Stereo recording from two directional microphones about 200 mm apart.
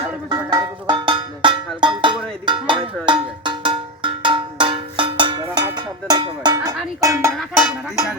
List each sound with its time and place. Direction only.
0.3 s cowbell: 20° right (ahead or behind)
7.0 s music: 15° right (ahead or behind)